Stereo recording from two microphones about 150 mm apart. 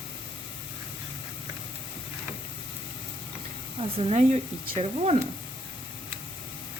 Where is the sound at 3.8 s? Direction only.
40° right (ahead or behind).